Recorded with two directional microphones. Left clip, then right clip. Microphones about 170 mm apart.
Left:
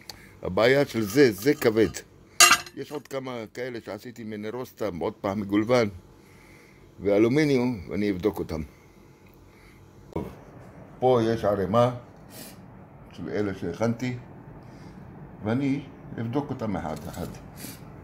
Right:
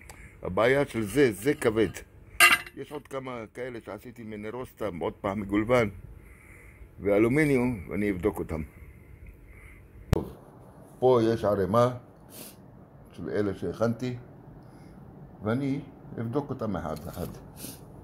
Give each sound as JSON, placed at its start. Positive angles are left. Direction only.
{"t": 0.4, "sound": "speech", "side_deg": 10}
{"t": 7.0, "sound": "speech", "side_deg": 0}
{"t": 11.0, "sound": "a man's voice", "side_deg": -25}
{"t": 15.4, "sound": "speech", "side_deg": -15}